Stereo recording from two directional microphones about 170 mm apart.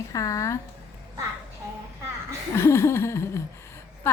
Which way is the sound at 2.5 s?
15° left (ahead or behind).